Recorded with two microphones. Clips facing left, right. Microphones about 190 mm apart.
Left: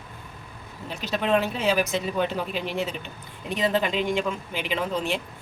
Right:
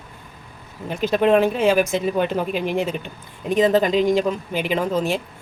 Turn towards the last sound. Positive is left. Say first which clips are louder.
# right 6 dB
turn(degrees=-45)  # may be behind; listen again after turning